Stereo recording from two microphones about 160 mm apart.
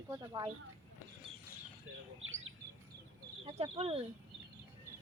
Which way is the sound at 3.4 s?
35° right (ahead or behind).